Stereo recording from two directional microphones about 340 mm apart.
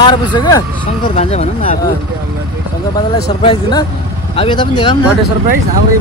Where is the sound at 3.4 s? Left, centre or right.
Centre.